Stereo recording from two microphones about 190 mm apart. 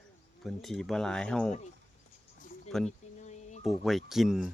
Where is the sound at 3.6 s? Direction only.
Centre (ahead or behind).